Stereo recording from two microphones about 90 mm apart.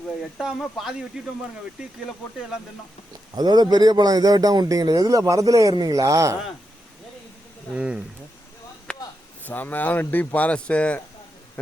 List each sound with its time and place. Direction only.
0.2 s speech: centre (ahead or behind)
3.3 s a man's voice: 50° right (ahead or behind)
7.8 s speech: 10° right (ahead or behind)
8.9 s a sound: 10° left (ahead or behind)
9.5 s speech: 20° left (ahead or behind)